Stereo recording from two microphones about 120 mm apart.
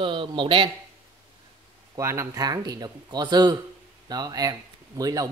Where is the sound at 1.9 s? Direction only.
25° right (ahead or behind).